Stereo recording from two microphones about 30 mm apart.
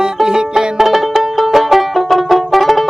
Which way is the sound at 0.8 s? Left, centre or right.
Centre.